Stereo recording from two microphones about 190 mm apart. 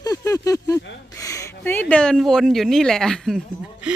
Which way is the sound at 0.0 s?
20° left (ahead or behind).